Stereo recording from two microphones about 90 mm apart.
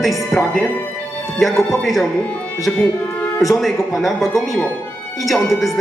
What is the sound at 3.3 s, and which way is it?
Speech, centre (ahead or behind).